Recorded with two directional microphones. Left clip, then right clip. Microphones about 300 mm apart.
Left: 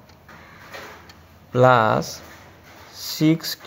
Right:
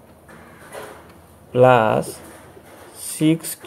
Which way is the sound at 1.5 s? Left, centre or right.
Left.